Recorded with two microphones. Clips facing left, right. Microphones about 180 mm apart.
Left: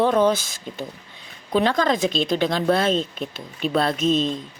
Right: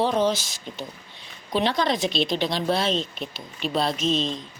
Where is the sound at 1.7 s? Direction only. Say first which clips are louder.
Left 3 dB; 45° left (ahead or behind).